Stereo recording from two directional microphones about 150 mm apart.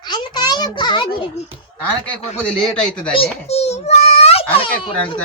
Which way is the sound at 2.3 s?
5° left (ahead or behind).